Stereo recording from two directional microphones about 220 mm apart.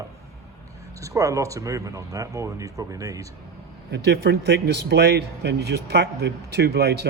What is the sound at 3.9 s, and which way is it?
A man's voice, 50° right (ahead or behind).